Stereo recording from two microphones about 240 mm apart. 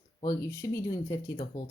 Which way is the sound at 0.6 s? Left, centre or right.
Centre.